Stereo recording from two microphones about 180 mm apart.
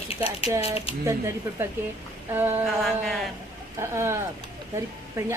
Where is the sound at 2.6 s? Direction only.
Centre (ahead or behind).